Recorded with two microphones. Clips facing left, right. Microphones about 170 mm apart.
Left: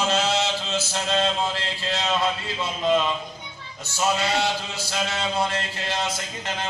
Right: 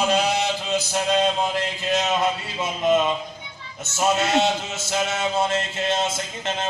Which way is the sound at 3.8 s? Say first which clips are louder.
Right 3 dB; 20° right (ahead or behind).